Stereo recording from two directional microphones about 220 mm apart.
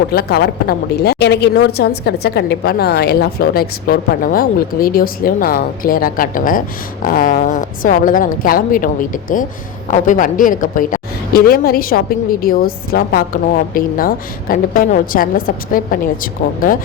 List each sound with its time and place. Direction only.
0.1 s a woman's voice: 45° left (ahead or behind)